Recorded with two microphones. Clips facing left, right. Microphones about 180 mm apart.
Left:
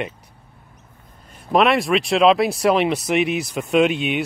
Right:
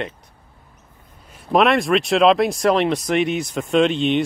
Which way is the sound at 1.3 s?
Centre (ahead or behind).